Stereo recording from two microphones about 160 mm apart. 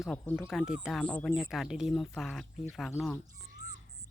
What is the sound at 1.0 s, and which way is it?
Speech, 10° left (ahead or behind).